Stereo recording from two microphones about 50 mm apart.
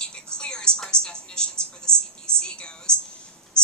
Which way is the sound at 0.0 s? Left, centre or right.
Centre.